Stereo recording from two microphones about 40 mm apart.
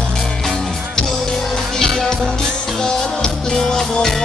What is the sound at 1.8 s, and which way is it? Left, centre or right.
Music, centre.